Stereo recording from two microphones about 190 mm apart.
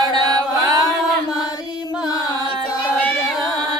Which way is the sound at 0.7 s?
20° right (ahead or behind).